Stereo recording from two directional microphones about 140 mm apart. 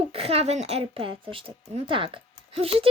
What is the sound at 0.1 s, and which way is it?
Speech, 45° right (ahead or behind).